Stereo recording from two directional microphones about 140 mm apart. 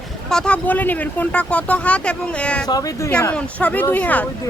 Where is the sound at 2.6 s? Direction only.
30° left (ahead or behind).